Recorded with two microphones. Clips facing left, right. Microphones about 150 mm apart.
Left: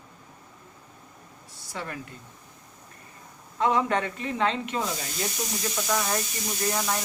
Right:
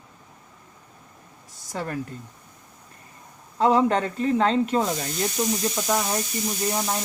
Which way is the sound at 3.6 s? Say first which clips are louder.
Right 5 dB; 35° right (ahead or behind).